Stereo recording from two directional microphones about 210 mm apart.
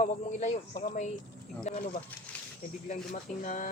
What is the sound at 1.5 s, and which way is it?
Speech, centre (ahead or behind).